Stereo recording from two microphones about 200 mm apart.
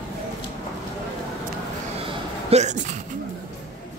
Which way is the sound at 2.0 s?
30° right (ahead or behind).